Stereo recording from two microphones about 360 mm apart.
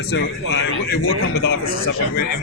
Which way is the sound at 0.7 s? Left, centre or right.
Left.